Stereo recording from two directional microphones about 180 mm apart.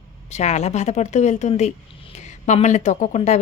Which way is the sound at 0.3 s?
40° left (ahead or behind).